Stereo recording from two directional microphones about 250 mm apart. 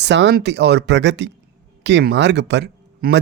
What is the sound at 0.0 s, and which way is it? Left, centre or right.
A man's voice, right.